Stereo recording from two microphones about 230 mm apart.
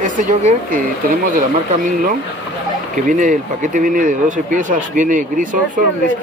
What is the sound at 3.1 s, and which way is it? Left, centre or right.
Speech, right.